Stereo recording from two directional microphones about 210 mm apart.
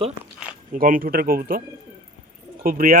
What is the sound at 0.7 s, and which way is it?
Speech, 40° right (ahead or behind).